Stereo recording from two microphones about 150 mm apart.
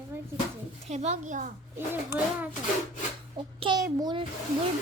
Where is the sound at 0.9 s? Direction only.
50° right (ahead or behind).